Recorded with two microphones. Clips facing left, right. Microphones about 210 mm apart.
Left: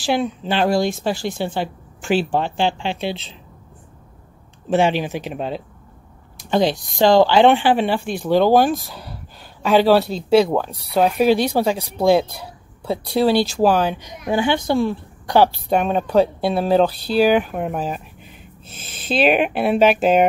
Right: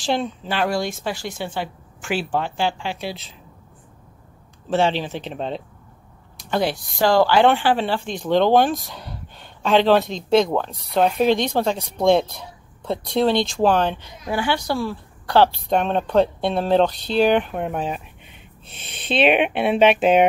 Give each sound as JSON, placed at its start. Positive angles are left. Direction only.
{"t": 0.0, "sound": "speech", "side_deg": 5}
{"t": 0.4, "sound": "speech", "side_deg": 25}
{"t": 4.6, "sound": "speech", "side_deg": 15}
{"t": 6.3, "sound": "speech", "side_deg": 20}